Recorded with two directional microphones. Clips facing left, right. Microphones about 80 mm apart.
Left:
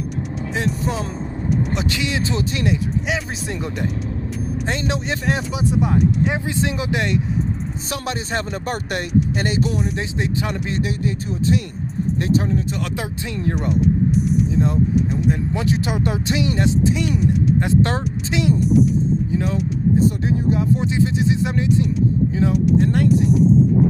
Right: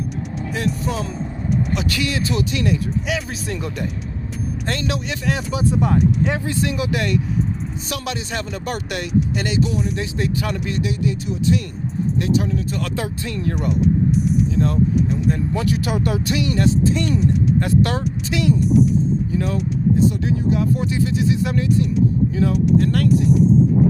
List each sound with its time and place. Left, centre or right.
0.5 s speech: left
5.5 s speech: centre
7.9 s speech: left
10.0 s speech: left
13.0 s speech: left
13.6 s speech: centre
14.9 s speech: centre
15.7 s speech: left
16.9 s speech: centre
17.6 s speech: left
19.4 s speech: centre
20.0 s speech: left
23.0 s speech: centre